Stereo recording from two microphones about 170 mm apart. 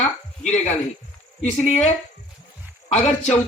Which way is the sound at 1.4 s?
45° left (ahead or behind).